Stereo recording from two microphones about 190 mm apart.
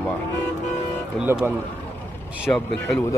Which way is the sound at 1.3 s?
10° right (ahead or behind).